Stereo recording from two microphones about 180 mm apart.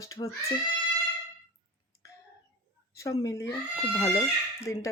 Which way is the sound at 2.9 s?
20° left (ahead or behind).